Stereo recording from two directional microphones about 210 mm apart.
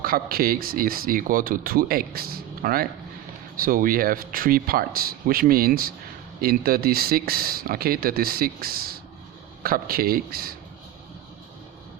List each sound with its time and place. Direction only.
0.0 s speech: 45° right (ahead or behind)